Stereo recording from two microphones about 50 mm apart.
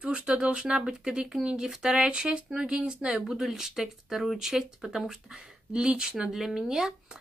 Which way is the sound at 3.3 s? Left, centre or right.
Centre.